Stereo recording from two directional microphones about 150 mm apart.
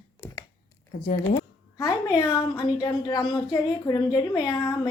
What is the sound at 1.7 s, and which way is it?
A woman's voice, 25° left (ahead or behind).